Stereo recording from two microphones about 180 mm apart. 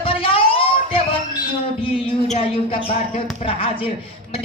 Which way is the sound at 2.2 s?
30° left (ahead or behind).